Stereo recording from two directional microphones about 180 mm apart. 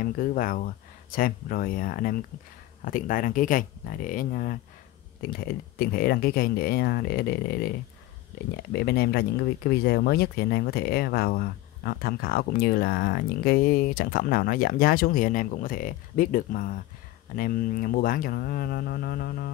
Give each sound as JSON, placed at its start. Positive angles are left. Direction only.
{"t": 0.0, "sound": "speech", "side_deg": 50}
{"t": 8.7, "sound": "speech", "side_deg": 60}